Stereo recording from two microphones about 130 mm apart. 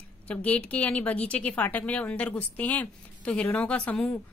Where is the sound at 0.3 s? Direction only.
10° left (ahead or behind).